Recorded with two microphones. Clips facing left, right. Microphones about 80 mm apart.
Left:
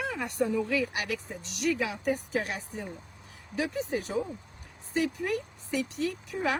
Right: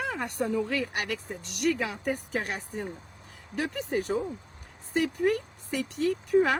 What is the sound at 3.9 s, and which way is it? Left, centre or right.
Speech, right.